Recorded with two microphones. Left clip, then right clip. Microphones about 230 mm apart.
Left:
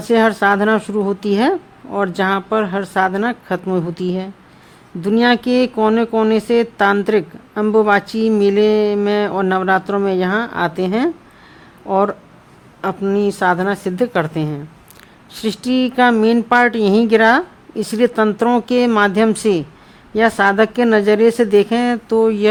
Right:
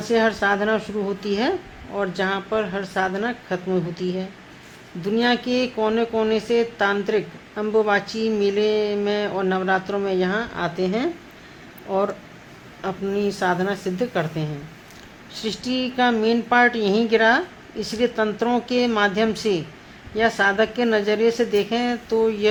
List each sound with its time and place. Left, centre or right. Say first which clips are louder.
0.0 s speech: left 6 dB; left